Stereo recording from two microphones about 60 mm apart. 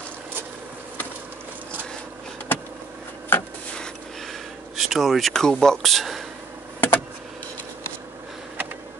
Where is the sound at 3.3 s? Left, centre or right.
Left.